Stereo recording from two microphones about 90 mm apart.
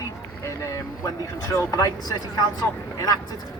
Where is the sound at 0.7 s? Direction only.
35° left (ahead or behind).